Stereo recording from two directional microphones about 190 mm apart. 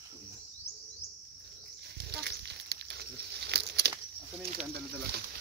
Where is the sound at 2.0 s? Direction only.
60° right (ahead or behind).